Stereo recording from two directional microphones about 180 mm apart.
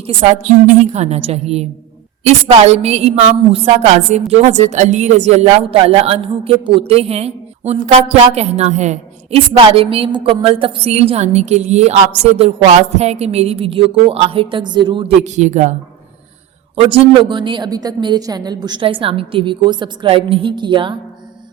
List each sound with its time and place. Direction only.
0.0 s a woman's voice: 35° right (ahead or behind)
16.7 s a woman's voice: 30° right (ahead or behind)